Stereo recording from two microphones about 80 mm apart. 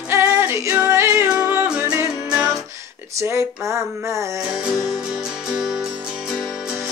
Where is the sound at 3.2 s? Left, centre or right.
Right.